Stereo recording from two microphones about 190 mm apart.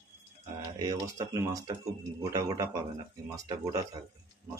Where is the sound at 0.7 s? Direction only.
20° right (ahead or behind).